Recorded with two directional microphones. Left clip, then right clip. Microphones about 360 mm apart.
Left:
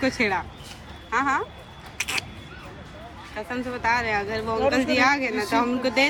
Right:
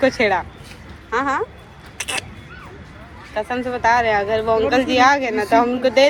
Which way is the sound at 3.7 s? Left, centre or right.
Centre.